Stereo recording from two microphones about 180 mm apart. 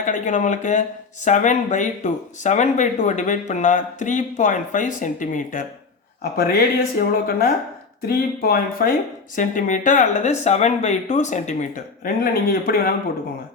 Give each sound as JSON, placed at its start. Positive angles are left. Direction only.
{"t": 0.0, "sound": "speech", "side_deg": 45}